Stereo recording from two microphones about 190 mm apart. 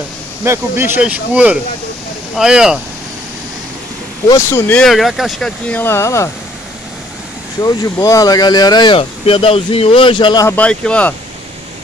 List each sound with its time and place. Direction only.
0.5 s speech: 10° right (ahead or behind)
4.3 s speech: 15° left (ahead or behind)
7.6 s speech: 15° left (ahead or behind)
10.5 s speech: 5° left (ahead or behind)